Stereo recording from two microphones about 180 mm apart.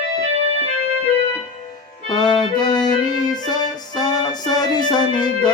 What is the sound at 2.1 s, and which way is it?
Music, 25° left (ahead or behind).